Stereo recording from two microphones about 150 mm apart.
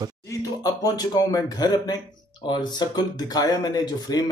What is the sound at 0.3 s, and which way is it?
Speech, 25° left (ahead or behind).